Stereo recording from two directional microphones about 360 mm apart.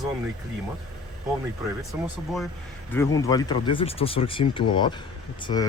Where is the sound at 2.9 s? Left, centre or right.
Centre.